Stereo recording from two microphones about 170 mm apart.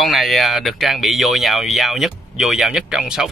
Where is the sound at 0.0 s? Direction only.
Centre (ahead or behind).